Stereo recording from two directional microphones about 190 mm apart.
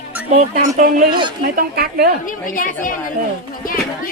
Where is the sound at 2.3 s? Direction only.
45° left (ahead or behind).